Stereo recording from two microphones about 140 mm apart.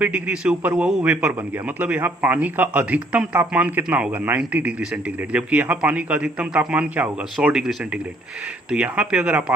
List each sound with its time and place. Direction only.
0.0 s a man's voice: 10° right (ahead or behind)